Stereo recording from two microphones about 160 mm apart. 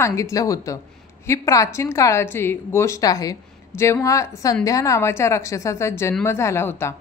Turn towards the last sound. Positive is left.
turn(degrees=15)  # may be behind; listen again after turning